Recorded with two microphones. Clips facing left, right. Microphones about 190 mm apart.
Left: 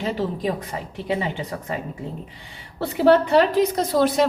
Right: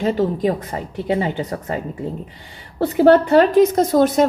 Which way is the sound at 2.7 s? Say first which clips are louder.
Right 4 dB; 50° right (ahead or behind).